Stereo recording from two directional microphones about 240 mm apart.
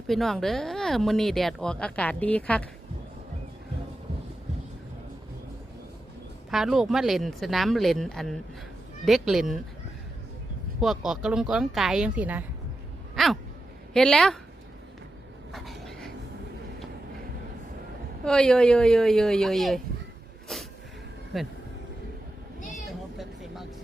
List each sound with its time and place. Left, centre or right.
0.1 s speech: centre
6.5 s speech: centre
10.8 s speech: centre
13.1 s a sound: centre
13.9 s speech: centre
15.5 s a sound: centre
18.3 s speech: centre
20.5 s a sound: centre
21.3 s speech: centre
23.1 s vehicle: centre